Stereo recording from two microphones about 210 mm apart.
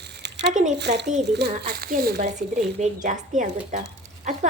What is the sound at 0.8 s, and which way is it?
A woman's voice, 55° right (ahead or behind).